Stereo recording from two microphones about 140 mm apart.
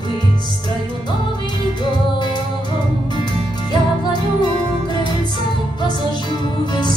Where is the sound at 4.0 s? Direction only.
30° left (ahead or behind).